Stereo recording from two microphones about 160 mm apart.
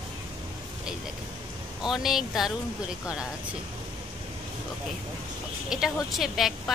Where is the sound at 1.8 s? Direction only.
5° right (ahead or behind).